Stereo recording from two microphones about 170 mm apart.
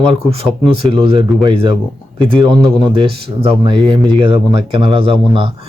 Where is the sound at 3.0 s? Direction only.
35° right (ahead or behind).